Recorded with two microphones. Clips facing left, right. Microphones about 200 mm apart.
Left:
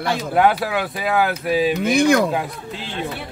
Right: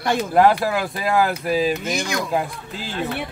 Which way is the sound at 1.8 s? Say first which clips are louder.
Left 9 dB; 60° left (ahead or behind).